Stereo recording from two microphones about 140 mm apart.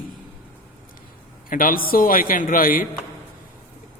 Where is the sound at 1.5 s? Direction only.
80° left.